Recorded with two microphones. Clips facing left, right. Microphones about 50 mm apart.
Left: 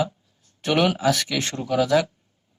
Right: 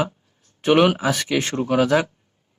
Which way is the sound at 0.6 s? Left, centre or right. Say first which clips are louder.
Right 5 dB; right.